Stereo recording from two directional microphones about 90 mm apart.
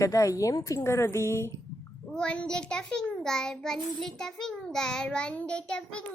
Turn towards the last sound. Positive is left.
turn(degrees=10)  # may be behind; listen again after turning